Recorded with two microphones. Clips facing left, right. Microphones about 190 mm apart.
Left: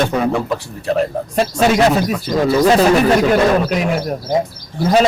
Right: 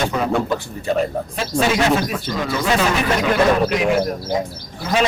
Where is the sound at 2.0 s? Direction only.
40° left (ahead or behind).